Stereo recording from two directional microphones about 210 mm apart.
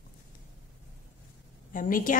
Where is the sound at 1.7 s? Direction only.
40° left (ahead or behind).